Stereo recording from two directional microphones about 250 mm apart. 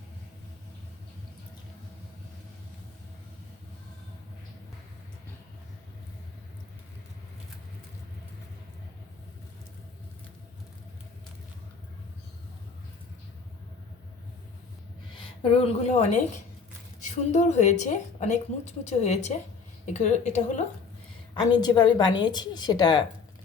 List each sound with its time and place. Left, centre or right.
15.1 s a woman's voice: left
21.3 s a woman's voice: centre